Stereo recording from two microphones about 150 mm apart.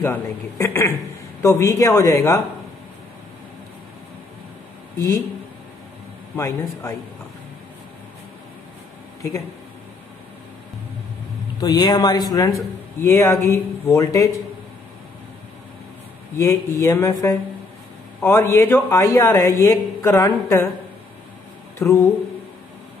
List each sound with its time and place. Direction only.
0.0 s a woman's voice: 15° left (ahead or behind)
6.3 s a woman's voice: 15° left (ahead or behind)
11.6 s a man's voice: 25° left (ahead or behind)
16.3 s a man's voice: 20° left (ahead or behind)
21.7 s a man's voice: 20° left (ahead or behind)